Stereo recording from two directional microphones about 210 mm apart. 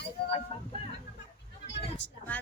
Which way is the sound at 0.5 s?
25° left (ahead or behind).